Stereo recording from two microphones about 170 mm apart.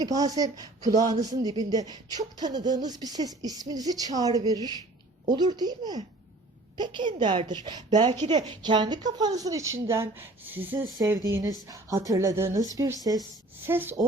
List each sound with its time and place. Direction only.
0.0 s a woman's voice: 20° right (ahead or behind)